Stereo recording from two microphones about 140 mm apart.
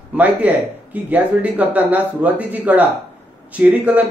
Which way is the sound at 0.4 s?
10° right (ahead or behind).